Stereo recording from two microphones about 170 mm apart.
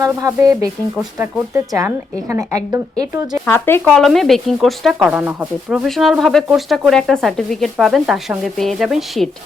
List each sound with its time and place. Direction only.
0.0 s a sound: 15° right (ahead or behind)
1.2 s speech: 15° right (ahead or behind)
3.4 s speech: 15° left (ahead or behind)